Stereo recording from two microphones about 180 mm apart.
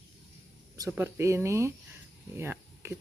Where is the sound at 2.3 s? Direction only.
15° right (ahead or behind).